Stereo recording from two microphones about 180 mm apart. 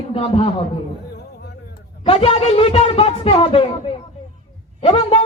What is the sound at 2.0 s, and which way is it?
Speech, 30° left (ahead or behind).